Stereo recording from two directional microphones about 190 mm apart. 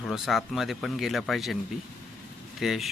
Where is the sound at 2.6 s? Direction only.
Centre (ahead or behind).